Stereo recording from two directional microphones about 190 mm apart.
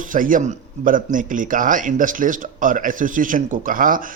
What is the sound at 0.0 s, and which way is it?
A man's voice, 45° right (ahead or behind).